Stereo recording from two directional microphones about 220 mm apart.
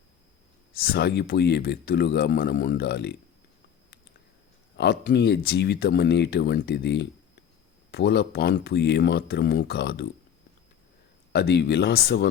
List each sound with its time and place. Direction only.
0.7 s speech: 45° left (ahead or behind)
4.8 s speech: 50° left (ahead or behind)
11.3 s speech: 50° left (ahead or behind)